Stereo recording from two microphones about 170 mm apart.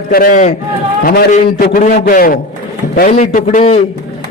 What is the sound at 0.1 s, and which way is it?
Speech, 55° left (ahead or behind).